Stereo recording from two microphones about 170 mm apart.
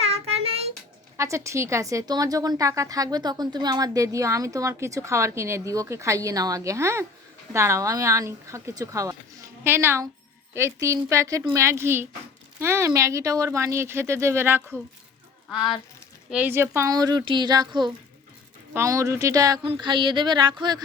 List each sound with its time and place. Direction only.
0.0 s child singing: 35° right (ahead or behind)
1.1 s a woman's voice: 15° right (ahead or behind)
15.4 s a woman's voice: 5° right (ahead or behind); by 20.8 s 25° right (ahead or behind)